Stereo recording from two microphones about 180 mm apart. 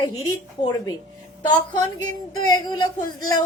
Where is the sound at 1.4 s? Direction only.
25° left (ahead or behind).